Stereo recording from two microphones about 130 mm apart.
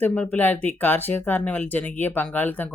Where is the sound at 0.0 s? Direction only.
10° left (ahead or behind).